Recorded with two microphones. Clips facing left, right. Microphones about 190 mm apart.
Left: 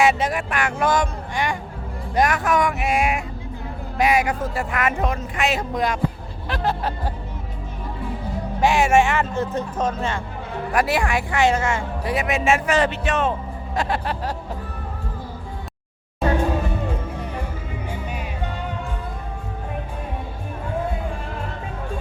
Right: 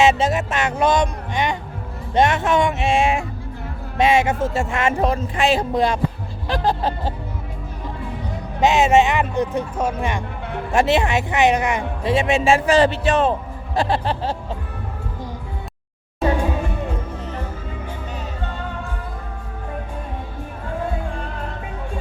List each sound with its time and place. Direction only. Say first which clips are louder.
0.0 s speech: right 3 dB; 25° right (ahead or behind)
8.6 s speech: right 2 dB; 20° right (ahead or behind)